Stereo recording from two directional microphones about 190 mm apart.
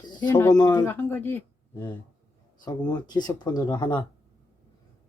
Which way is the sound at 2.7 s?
20° left (ahead or behind).